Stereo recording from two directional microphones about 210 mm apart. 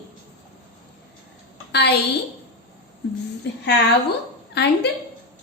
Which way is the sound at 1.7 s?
55° left (ahead or behind).